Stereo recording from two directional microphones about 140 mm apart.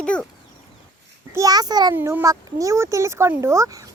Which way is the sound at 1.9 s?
15° right (ahead or behind).